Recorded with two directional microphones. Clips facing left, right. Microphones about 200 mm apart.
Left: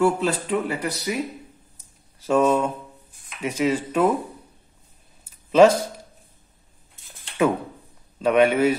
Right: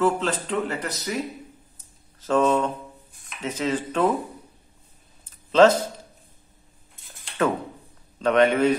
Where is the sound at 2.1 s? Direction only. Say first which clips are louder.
Left 2 dB; 10° left (ahead or behind).